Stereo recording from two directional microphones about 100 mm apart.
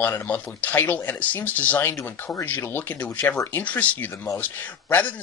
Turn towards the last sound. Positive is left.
turn(degrees=20)  # may be behind; listen again after turning